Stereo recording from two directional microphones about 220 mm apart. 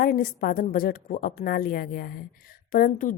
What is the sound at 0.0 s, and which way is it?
Speech, 40° left (ahead or behind).